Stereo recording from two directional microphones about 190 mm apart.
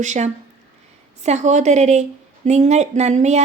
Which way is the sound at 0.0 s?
40° right (ahead or behind).